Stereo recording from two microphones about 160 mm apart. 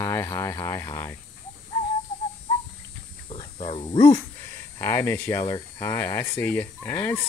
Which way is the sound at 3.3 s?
35° left (ahead or behind).